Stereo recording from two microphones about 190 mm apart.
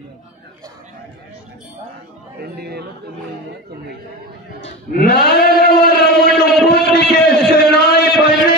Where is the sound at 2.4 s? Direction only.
60° right (ahead or behind).